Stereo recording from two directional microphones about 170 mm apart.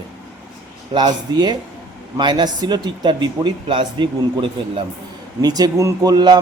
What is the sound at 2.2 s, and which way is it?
Speech, 25° right (ahead or behind).